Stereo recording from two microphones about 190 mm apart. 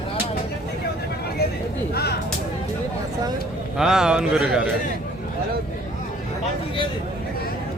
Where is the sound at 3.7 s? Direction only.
5° right (ahead or behind).